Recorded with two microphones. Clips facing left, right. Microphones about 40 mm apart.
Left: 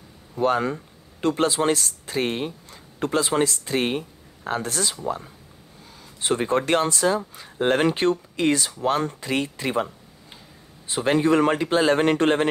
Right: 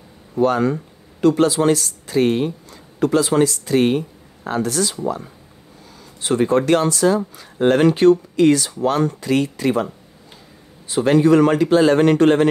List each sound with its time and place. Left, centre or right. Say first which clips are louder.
0.4 s a man's voice: right 5 dB; left
6.2 s a man's voice: right 6 dB; left
11.1 s a man's voice: right 5 dB; left